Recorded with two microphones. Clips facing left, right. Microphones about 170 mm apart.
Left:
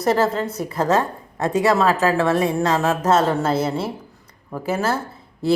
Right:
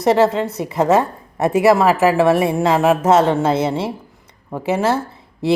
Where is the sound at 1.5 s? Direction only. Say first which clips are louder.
Right 4 dB; 10° right (ahead or behind).